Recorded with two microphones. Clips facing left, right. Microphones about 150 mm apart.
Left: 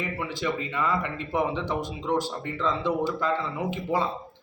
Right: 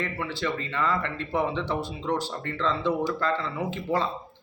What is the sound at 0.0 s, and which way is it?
A man's voice, 10° left (ahead or behind).